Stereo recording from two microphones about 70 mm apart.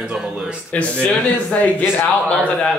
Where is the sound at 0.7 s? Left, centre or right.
Centre.